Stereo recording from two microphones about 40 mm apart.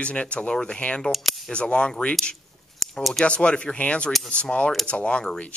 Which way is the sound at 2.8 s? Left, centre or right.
Centre.